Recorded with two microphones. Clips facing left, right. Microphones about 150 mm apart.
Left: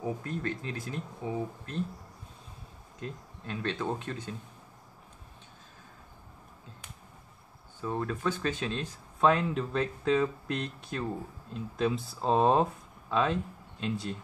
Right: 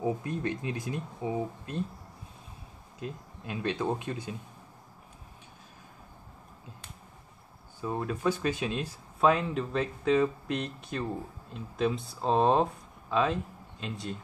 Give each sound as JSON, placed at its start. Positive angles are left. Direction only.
{"t": 0.0, "sound": "speech", "side_deg": -15}
{"t": 3.0, "sound": "speech", "side_deg": -10}
{"t": 7.8, "sound": "speech", "side_deg": -10}